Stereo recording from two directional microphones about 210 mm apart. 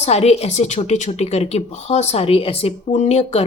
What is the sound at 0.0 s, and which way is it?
A woman's voice, 30° left (ahead or behind).